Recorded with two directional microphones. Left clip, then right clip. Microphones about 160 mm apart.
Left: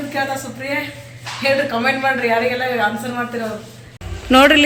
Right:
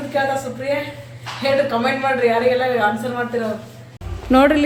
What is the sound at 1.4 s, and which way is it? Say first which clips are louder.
Speech: left 1 dB; 10° left (ahead or behind).